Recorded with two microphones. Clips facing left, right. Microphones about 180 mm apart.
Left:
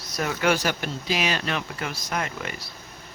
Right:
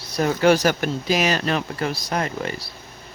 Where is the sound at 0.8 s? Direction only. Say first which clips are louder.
Right 6 dB; 45° right (ahead or behind).